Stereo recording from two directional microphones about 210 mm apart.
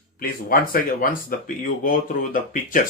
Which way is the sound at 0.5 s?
45° left (ahead or behind).